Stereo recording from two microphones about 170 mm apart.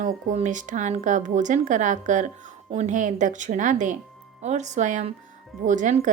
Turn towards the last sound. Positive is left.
turn(degrees=-45)  # may be behind; listen again after turning